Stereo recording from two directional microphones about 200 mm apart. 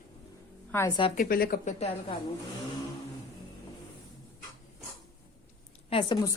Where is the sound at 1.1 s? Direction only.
50° left (ahead or behind).